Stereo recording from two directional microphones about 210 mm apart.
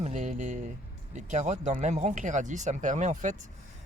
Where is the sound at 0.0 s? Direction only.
35° right (ahead or behind).